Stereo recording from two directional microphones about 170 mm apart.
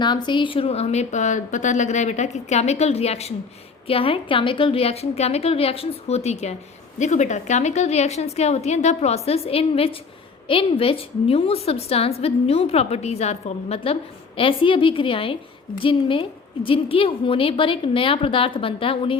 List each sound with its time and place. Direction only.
0.0 s a woman's voice: 25° left (ahead or behind)